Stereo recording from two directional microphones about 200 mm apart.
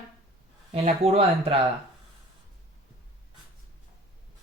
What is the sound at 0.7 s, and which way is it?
Speech, 30° right (ahead or behind).